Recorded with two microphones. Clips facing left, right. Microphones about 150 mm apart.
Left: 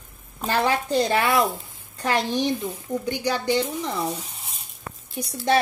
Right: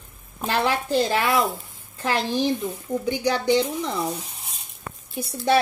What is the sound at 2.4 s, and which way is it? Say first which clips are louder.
Speech: right 1 dB; 10° right (ahead or behind).